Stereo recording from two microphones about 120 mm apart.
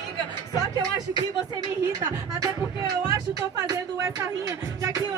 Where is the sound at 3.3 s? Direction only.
25° right (ahead or behind).